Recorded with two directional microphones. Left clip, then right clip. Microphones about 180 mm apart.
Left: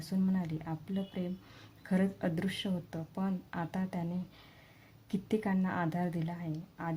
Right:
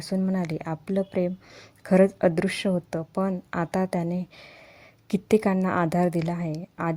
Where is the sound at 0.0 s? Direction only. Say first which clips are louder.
Right 8 dB; 45° right (ahead or behind).